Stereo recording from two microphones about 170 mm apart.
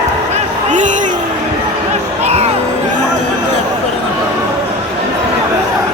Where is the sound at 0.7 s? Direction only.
45° right (ahead or behind).